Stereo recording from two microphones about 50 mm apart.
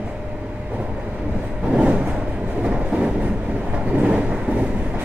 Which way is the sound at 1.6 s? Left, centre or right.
Right.